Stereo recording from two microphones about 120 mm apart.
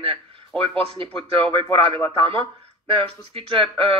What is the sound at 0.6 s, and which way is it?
Speech, 50° right (ahead or behind).